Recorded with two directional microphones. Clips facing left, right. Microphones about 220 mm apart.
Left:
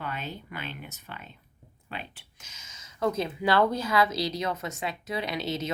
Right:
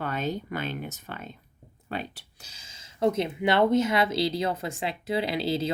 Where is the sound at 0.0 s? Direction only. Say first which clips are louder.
Right 7 dB; 45° right (ahead or behind).